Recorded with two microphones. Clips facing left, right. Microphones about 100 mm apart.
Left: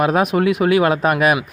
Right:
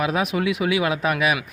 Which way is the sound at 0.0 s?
45° left (ahead or behind).